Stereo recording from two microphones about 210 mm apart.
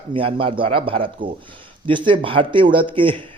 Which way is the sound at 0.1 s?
25° right (ahead or behind).